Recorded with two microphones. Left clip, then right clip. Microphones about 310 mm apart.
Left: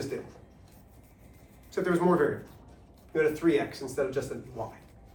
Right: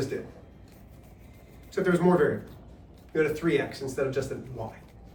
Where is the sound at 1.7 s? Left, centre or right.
Left.